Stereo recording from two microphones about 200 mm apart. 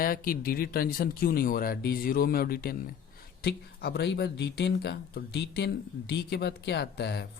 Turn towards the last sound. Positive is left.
turn(degrees=55)  # may be behind; listen again after turning